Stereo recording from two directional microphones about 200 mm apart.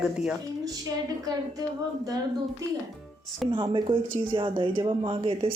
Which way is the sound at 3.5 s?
25° right (ahead or behind).